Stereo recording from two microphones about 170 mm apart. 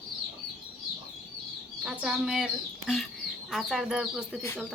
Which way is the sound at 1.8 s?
5° right (ahead or behind).